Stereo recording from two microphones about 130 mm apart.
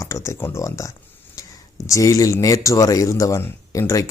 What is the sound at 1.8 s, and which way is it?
A man's voice, 25° left (ahead or behind).